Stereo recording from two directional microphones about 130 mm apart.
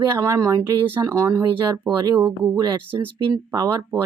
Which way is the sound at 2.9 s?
30° right (ahead or behind).